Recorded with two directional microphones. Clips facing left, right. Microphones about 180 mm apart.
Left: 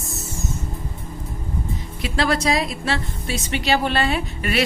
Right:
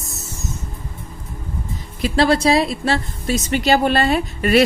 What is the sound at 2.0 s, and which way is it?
A woman's voice, 35° right (ahead or behind).